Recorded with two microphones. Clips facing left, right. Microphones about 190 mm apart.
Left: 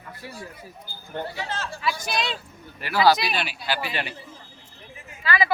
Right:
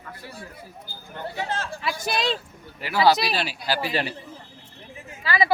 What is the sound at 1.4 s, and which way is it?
Speech, 50° right (ahead or behind).